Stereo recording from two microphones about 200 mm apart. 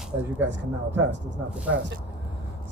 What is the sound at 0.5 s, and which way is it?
Speech, 65° right (ahead or behind).